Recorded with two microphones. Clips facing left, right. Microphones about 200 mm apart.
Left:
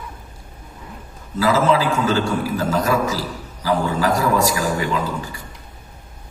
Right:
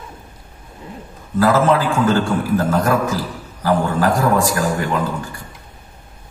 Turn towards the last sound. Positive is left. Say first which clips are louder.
# right 2 dB
turn(degrees=-55)  # may be behind; listen again after turning